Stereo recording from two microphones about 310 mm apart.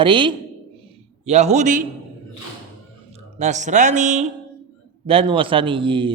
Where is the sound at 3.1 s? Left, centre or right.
Right.